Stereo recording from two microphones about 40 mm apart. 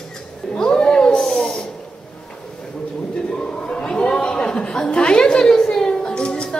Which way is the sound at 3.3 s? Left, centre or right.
Left.